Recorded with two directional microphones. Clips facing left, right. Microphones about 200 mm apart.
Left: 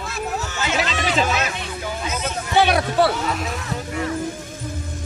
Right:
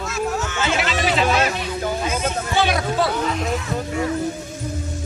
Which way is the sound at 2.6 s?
60° left (ahead or behind).